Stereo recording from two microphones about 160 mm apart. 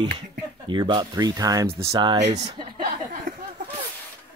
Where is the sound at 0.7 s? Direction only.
30° right (ahead or behind).